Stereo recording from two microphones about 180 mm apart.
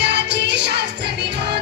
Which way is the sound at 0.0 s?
70° right (ahead or behind).